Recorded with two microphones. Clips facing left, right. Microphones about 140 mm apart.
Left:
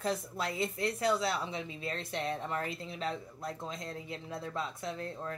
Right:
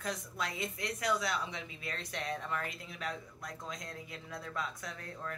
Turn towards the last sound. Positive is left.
turn(degrees=30)  # may be behind; listen again after turning